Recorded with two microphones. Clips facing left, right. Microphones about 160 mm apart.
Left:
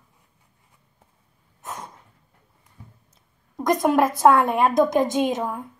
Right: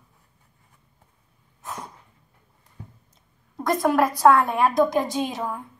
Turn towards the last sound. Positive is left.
turn(degrees=20)  # may be behind; listen again after turning